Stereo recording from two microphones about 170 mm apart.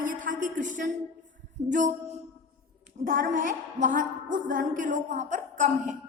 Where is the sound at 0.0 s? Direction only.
50° right (ahead or behind).